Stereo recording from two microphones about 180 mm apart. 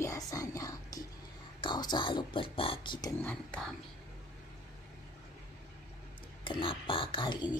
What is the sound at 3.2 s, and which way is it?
Speech, 5° left (ahead or behind).